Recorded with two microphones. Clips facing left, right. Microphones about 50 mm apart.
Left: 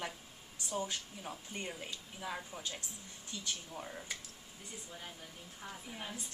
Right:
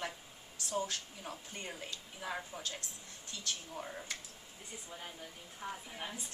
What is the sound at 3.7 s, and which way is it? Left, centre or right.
Speech, centre.